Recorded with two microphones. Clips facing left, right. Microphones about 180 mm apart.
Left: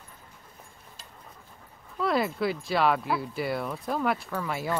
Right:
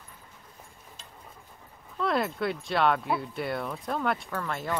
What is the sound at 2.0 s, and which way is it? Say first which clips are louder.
Speech: left 1 dB; centre (ahead or behind).